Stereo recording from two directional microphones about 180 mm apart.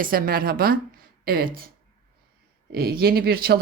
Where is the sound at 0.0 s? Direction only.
55° right (ahead or behind).